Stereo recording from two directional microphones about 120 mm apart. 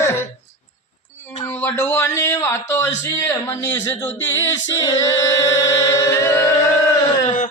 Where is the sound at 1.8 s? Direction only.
25° left (ahead or behind).